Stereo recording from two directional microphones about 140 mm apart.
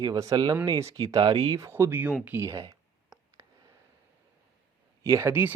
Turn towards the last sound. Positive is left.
turn(degrees=-15)  # may be behind; listen again after turning